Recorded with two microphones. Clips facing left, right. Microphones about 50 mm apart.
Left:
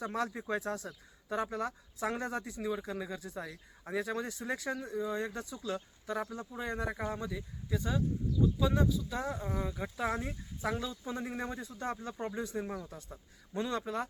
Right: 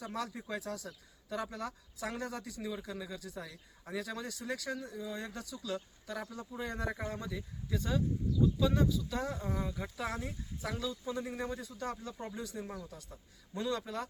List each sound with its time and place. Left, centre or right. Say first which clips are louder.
0.0 s speech: left 4 dB; left
6.5 s speech: right 1 dB; centre